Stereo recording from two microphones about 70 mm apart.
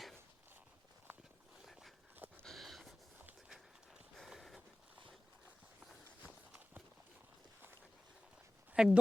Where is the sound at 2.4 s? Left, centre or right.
Centre.